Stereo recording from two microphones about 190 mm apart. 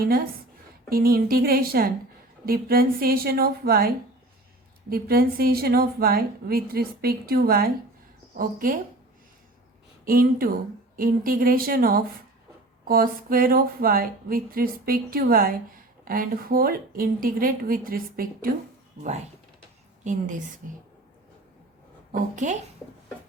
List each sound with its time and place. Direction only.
0.9 s speech: 50° right (ahead or behind)
10.1 s speech: 50° right (ahead or behind)
20.1 s a woman's voice: 40° right (ahead or behind)
22.1 s a woman's voice: 40° right (ahead or behind)